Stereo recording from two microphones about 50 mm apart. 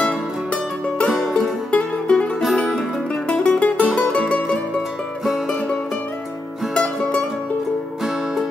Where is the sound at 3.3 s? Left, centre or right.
Left.